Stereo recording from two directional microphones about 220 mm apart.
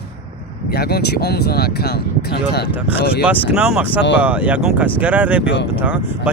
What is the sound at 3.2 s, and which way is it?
Speech, 5° right (ahead or behind).